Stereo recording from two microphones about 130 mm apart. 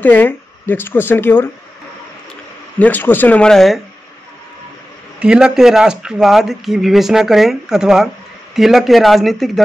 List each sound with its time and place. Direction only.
0.0 s speech: 15° left (ahead or behind)
2.8 s speech: 15° left (ahead or behind)
5.2 s speech: 5° right (ahead or behind)